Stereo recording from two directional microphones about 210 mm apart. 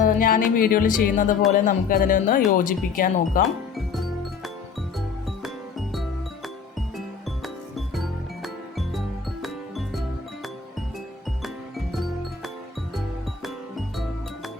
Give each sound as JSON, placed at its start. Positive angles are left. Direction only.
{"t": 0.0, "sound": "music", "side_deg": 40}
{"t": 1.5, "sound": "speech", "side_deg": 40}
{"t": 3.4, "sound": "music", "side_deg": 0}
{"t": 7.4, "sound": "music", "side_deg": 0}
{"t": 11.4, "sound": "music", "side_deg": 0}